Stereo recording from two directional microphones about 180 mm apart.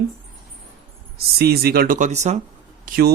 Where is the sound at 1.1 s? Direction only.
60° right (ahead or behind); by 2.4 s 40° right (ahead or behind).